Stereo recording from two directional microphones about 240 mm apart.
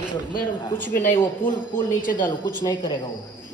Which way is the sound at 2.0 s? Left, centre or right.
Left.